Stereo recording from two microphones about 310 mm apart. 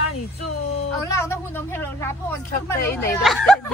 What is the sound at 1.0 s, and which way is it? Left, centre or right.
A woman's voice, centre.